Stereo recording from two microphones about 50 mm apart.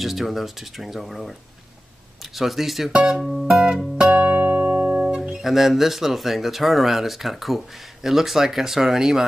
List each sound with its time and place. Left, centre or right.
0.0 s speech: centre
2.3 s speech: centre
2.9 s speech: centre
3.2 s music: centre
4.2 s music: right
5.3 s speech: centre